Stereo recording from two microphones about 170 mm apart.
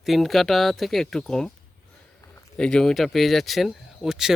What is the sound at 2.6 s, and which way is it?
Speech, 5° left (ahead or behind).